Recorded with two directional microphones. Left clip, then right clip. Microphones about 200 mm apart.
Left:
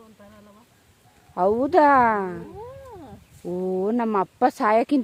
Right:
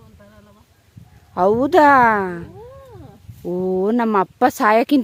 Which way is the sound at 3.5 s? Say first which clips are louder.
Right 5 dB; 35° right (ahead or behind).